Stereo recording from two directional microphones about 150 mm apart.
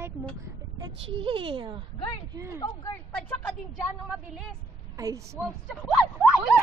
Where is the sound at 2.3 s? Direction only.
20° right (ahead or behind).